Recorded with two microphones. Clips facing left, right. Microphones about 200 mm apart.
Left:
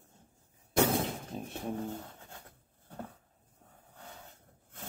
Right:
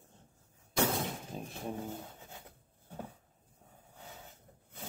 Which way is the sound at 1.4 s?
5° right (ahead or behind).